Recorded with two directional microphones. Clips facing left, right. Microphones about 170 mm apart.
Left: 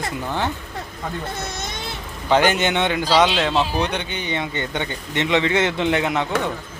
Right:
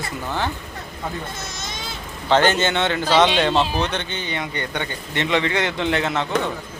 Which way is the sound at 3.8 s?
10° left (ahead or behind).